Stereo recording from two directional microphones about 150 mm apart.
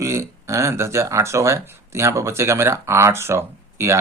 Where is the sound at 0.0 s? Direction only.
20° right (ahead or behind).